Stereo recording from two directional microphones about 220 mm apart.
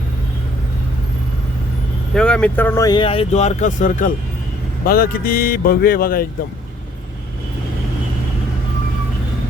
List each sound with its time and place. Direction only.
2.1 s speech: 5° left (ahead or behind); by 6.2 s 40° left (ahead or behind)